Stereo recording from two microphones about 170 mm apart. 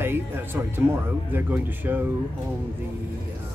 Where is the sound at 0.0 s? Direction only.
15° right (ahead or behind).